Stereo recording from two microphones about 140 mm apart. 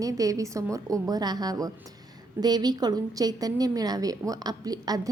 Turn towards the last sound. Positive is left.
turn(degrees=-25)  # may be behind; listen again after turning